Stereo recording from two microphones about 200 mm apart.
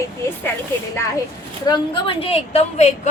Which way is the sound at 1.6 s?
25° left (ahead or behind).